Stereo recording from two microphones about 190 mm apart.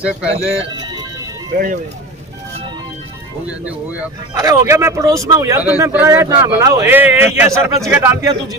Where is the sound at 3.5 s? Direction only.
5° right (ahead or behind).